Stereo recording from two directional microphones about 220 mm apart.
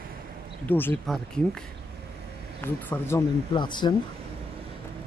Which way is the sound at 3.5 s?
20° left (ahead or behind).